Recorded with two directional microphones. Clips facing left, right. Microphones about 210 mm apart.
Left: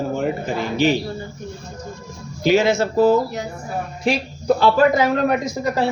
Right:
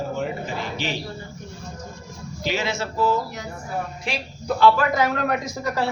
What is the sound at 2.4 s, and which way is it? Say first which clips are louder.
Speech: left 10 dB; 45° left (ahead or behind).